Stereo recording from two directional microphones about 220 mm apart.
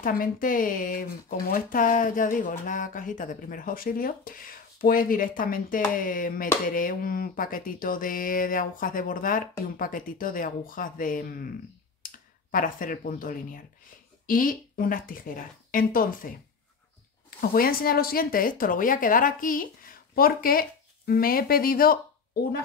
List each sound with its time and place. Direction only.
0.0 s speech: 40° left (ahead or behind)
17.4 s speech: 40° left (ahead or behind)